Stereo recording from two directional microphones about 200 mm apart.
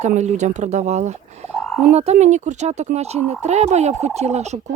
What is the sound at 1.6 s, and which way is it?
Frog, 5° left (ahead or behind).